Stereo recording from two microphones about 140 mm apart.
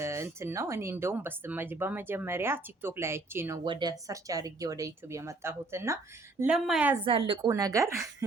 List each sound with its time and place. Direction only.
0.0 s speech: 20° right (ahead or behind)
3.6 s speech: 30° right (ahead or behind)
6.4 s speech: 5° right (ahead or behind)
7.0 s speech: 40° right (ahead or behind)
7.5 s speech: 20° right (ahead or behind)